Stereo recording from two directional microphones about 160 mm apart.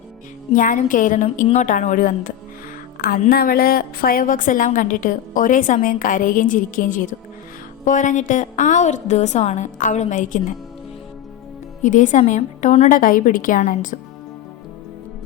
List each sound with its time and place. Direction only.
0.5 s a woman's voice: 55° left (ahead or behind)
3.0 s a woman's voice: 70° left (ahead or behind); by 10.4 s 55° left (ahead or behind)
11.8 s a woman's voice: 55° left (ahead or behind)
12.9 s a woman's voice: 60° left (ahead or behind)